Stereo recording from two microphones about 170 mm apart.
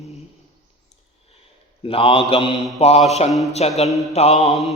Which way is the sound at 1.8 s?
35° left (ahead or behind).